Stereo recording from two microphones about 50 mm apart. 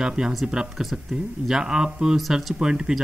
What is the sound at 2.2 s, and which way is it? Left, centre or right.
Speech, centre.